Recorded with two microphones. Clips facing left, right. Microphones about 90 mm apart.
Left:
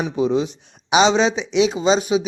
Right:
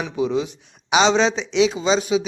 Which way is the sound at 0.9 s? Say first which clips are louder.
Left 1 dB; 10° left (ahead or behind).